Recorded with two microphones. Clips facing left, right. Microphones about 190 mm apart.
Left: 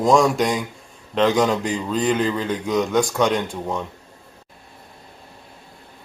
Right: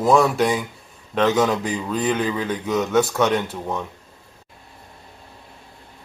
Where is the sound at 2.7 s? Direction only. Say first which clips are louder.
Left 1 dB; 10° left (ahead or behind).